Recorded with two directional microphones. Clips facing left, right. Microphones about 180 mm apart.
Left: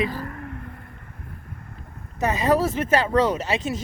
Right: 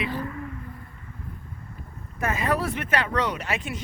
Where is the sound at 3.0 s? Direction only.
30° left (ahead or behind).